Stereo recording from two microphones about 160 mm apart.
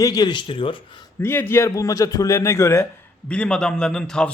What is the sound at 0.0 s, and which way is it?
Speech, 25° left (ahead or behind).